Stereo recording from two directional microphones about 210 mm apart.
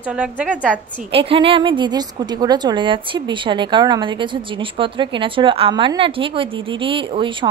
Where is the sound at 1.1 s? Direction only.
25° right (ahead or behind).